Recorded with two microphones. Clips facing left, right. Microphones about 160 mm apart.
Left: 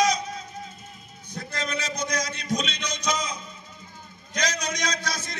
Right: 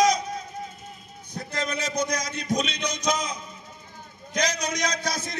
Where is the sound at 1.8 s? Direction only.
55° right (ahead or behind).